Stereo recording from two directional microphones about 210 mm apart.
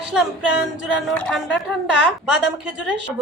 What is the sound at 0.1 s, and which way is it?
A woman's voice, 5° right (ahead or behind).